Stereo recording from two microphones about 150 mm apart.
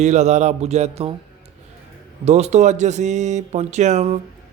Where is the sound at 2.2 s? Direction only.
50° right (ahead or behind).